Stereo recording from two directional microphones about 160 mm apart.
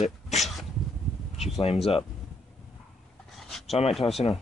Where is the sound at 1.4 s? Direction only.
40° left (ahead or behind).